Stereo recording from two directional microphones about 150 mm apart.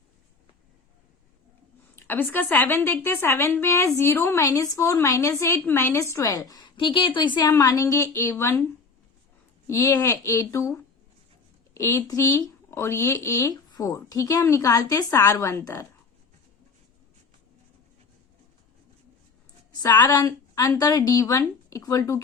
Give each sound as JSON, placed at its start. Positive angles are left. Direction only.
{"t": 2.0, "sound": "a woman's voice", "side_deg": 10}
{"t": 9.6, "sound": "a woman's voice", "side_deg": 20}
{"t": 20.1, "sound": "a woman's voice", "side_deg": 25}